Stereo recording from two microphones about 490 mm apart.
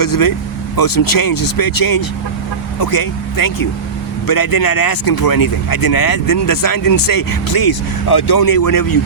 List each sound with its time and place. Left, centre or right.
0.0 s speech: left